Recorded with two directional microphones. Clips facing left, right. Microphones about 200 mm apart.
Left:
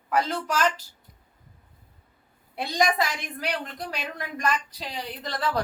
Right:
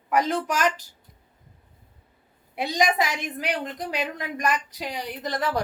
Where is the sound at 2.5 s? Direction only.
15° right (ahead or behind).